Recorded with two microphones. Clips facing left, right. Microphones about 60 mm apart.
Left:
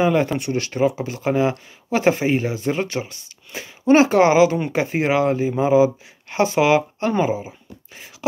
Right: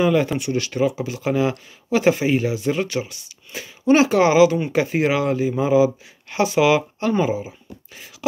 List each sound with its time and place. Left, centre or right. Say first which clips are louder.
0.0 s speech: even; left